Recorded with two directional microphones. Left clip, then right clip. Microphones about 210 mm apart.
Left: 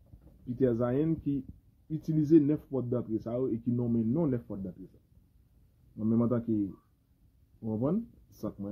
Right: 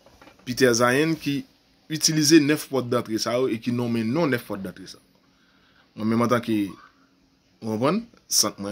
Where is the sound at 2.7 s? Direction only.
30° right (ahead or behind).